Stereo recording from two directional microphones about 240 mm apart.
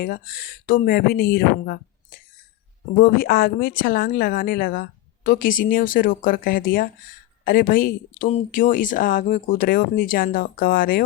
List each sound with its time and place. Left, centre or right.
0.0 s a woman's voice: left
3.0 s a woman's voice: left